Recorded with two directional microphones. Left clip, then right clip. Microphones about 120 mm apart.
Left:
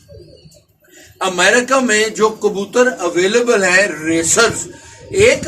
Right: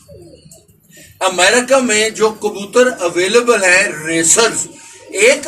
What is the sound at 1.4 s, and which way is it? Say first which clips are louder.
Speech: right 1 dB; 15° left (ahead or behind).